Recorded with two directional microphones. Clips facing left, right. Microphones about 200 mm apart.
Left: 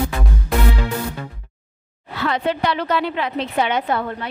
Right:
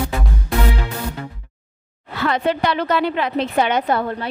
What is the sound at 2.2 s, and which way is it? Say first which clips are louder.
A woman's voice: right 2 dB; 45° right (ahead or behind).